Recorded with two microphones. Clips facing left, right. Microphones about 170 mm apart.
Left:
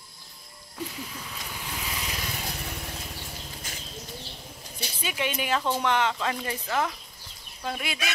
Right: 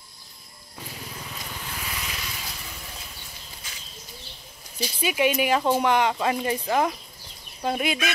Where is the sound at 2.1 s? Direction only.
45° left (ahead or behind).